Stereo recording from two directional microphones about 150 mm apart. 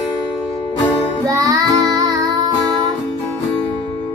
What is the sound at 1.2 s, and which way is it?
Child singing, 20° right (ahead or behind).